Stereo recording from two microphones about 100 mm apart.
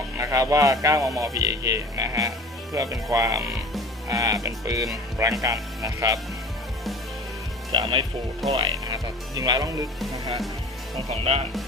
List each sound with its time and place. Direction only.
0.2 s speech: 35° right (ahead or behind)
7.7 s speech: 65° right (ahead or behind)
8.4 s speech: centre (ahead or behind)
8.9 s speech: 35° right (ahead or behind)
11.1 s speech: 90° right